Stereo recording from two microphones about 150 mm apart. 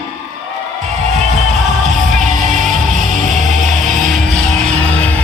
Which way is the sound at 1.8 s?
50° right (ahead or behind).